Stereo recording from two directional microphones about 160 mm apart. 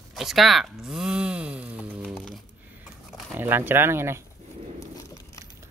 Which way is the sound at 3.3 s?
10° right (ahead or behind).